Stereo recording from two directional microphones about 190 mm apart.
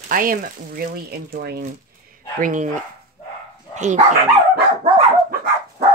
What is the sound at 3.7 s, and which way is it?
Speech, 40° right (ahead or behind).